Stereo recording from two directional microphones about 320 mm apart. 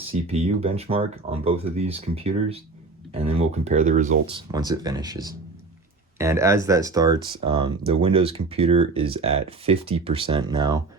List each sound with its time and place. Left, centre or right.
0.3 s speech: centre